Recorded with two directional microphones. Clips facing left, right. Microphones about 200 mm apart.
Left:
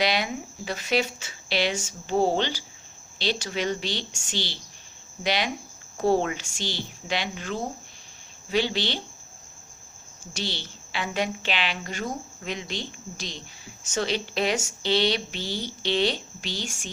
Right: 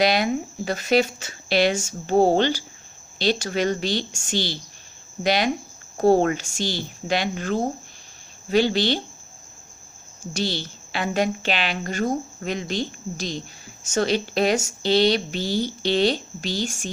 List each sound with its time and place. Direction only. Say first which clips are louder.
0.0 s speech: right 6 dB; 45° right (ahead or behind)
10.3 s speech: right 7 dB; 45° right (ahead or behind)